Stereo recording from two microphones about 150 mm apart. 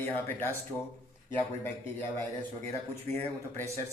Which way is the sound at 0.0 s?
15° left (ahead or behind).